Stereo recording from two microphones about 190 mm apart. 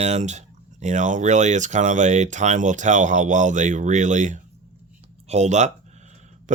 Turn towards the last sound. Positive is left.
turn(degrees=-40)  # may be behind; listen again after turning